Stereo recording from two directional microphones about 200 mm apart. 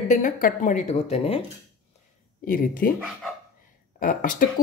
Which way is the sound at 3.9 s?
45° left (ahead or behind).